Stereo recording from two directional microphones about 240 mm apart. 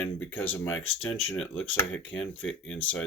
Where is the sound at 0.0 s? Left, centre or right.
Centre.